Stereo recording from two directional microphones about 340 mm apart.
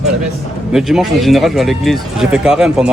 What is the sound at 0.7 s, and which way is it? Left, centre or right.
Speech, centre.